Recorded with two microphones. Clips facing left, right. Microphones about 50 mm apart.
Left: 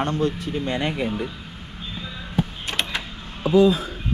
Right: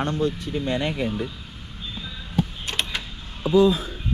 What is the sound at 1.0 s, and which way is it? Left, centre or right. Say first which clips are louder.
Speech: left 1 dB; left.